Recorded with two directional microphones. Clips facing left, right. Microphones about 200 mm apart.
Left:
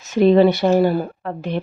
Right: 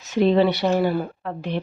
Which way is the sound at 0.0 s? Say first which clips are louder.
Left 5 dB; 50° left (ahead or behind).